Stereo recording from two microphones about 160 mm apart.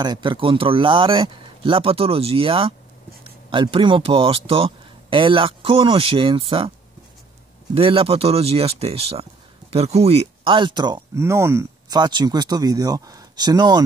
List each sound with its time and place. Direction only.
0.0 s speech: 25° right (ahead or behind)
7.7 s speech: 35° right (ahead or behind)